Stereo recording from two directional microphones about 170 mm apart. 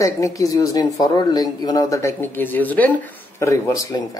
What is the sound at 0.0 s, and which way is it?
Speech, 20° left (ahead or behind).